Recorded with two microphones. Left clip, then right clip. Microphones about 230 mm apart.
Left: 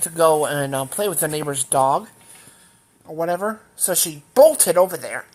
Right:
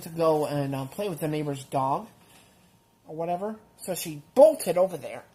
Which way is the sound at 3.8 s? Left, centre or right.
Left.